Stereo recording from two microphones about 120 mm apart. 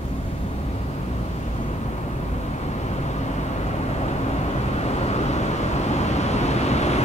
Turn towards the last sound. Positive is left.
turn(degrees=65)  # may be behind; listen again after turning